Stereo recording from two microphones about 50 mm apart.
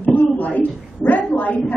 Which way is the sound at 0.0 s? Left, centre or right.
Left.